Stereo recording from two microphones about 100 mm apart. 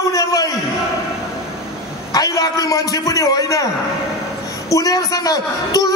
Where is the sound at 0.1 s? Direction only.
35° left (ahead or behind).